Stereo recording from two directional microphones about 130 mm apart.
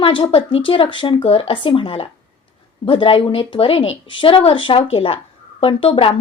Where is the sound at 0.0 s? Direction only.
40° left (ahead or behind).